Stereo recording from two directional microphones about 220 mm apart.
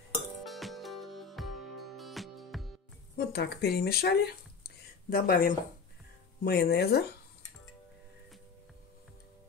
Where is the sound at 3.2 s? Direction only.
45° left (ahead or behind).